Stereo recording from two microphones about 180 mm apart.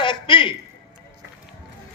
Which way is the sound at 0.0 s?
25° left (ahead or behind).